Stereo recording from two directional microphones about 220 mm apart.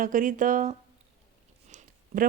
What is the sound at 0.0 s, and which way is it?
Speech, 40° right (ahead or behind).